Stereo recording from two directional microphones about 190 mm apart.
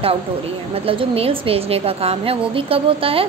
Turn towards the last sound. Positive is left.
turn(degrees=-30)  # may be behind; listen again after turning